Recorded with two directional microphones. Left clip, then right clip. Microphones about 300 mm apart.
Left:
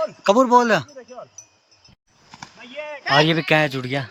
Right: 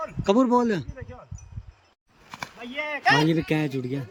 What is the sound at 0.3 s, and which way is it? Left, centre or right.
Speech, centre.